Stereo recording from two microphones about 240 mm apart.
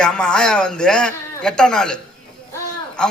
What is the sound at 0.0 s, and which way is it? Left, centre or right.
A man's voice, centre.